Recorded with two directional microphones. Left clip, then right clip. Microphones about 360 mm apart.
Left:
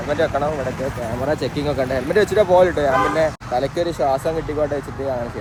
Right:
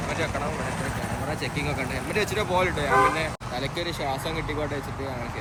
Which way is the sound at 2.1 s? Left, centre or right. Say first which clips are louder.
Left 11 dB; left.